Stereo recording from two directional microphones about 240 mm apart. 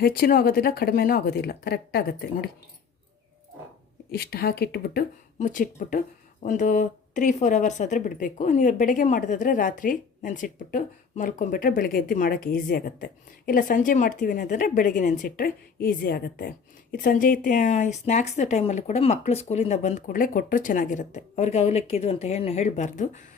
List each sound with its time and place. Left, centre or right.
0.0 s speech: left
4.1 s speech: left